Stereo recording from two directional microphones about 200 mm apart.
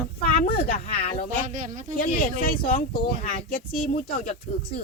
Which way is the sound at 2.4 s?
45° left (ahead or behind).